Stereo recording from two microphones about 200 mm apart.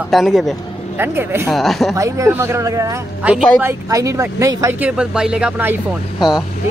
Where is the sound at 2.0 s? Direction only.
15° right (ahead or behind).